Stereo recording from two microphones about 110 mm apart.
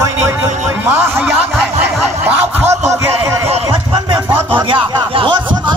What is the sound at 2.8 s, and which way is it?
Speech, 25° right (ahead or behind).